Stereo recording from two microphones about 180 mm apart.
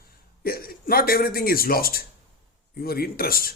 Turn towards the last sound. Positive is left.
turn(degrees=55)  # may be behind; listen again after turning